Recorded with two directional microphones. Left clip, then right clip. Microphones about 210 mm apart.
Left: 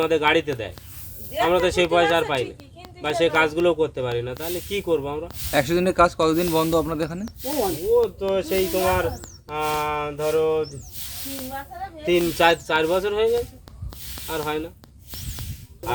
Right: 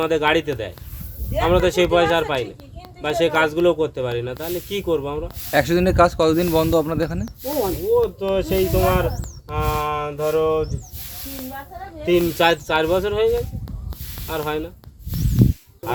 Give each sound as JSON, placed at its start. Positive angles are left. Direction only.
{"t": 0.0, "sound": "speech", "side_deg": 0}
{"t": 8.6, "sound": "speech", "side_deg": 35}
{"t": 8.9, "sound": "speech", "side_deg": 0}
{"t": 11.2, "sound": "speech", "side_deg": 35}
{"t": 12.0, "sound": "speech", "side_deg": 0}